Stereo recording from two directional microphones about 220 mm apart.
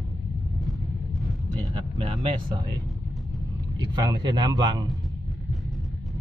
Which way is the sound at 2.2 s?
20° right (ahead or behind).